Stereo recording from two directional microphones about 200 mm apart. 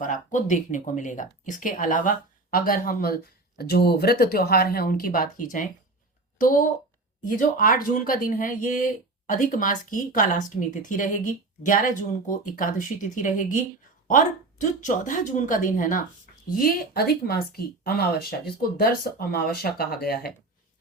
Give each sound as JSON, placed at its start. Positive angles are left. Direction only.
{"t": 0.0, "sound": "speech", "side_deg": 40}